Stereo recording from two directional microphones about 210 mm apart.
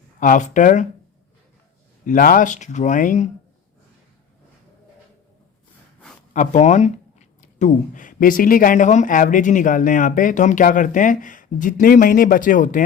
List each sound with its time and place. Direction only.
0.2 s speech: 40° left (ahead or behind)
2.0 s speech: 40° left (ahead or behind)
6.3 s speech: 35° left (ahead or behind)